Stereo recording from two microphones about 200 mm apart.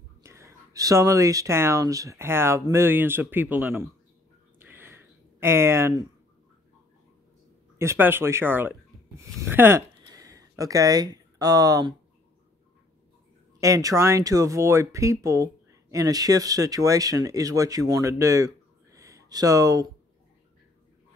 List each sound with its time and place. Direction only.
0.2 s speech: 15° right (ahead or behind)
4.6 s a sound: 10° right (ahead or behind)
7.8 s speech: 10° right (ahead or behind)
13.6 s speech: 15° right (ahead or behind)